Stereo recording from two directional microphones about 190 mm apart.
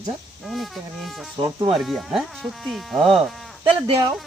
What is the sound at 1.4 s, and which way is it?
Speech, 20° right (ahead or behind).